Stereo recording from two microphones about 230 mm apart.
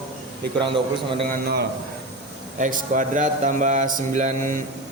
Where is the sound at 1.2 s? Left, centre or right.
Right.